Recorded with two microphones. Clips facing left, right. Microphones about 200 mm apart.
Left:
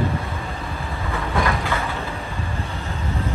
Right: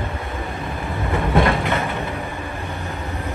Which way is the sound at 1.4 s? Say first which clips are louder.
Right 4 dB; 25° right (ahead or behind).